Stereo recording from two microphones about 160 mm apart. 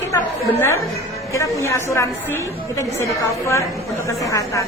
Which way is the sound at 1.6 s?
15° left (ahead or behind).